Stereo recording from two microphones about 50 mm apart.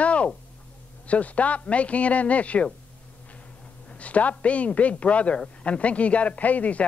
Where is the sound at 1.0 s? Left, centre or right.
Left.